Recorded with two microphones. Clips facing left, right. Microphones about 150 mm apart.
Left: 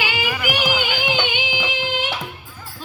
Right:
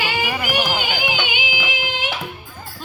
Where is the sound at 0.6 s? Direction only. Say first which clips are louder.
Left 2 dB; 45° right (ahead or behind).